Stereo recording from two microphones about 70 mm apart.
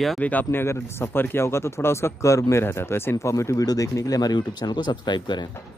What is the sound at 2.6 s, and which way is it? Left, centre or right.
Speech, left.